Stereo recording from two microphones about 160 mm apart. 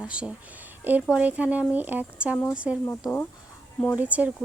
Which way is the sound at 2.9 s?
10° left (ahead or behind).